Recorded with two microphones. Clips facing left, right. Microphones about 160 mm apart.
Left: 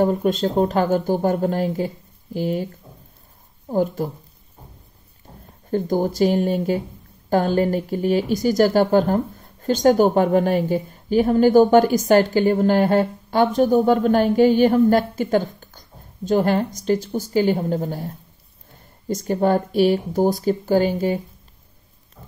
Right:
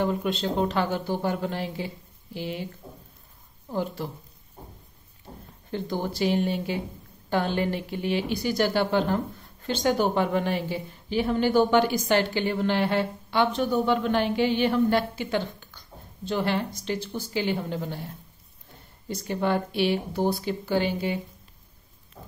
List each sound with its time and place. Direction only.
0.0 s a woman's voice: 45° left (ahead or behind)
5.7 s a woman's voice: 45° left (ahead or behind)